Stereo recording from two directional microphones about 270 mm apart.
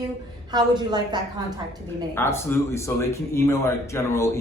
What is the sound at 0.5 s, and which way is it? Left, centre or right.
Speech, centre.